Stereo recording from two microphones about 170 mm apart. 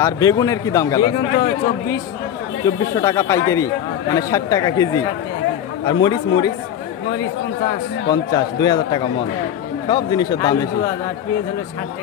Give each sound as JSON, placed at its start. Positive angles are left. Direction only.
{"t": 0.0, "sound": "speech", "side_deg": 20}
{"t": 3.0, "sound": "speech", "side_deg": 20}
{"t": 8.1, "sound": "speech", "side_deg": 20}